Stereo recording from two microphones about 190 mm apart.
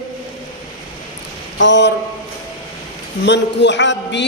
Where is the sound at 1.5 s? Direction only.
70° left (ahead or behind).